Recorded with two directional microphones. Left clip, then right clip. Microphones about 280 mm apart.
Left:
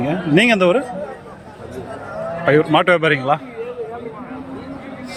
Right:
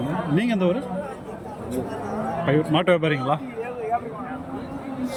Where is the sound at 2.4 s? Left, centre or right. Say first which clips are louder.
Left 8 dB; centre.